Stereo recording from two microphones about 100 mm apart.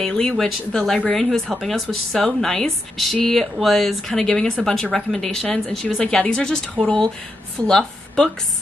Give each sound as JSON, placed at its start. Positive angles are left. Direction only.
{"t": 0.0, "sound": "a woman's voice", "side_deg": 5}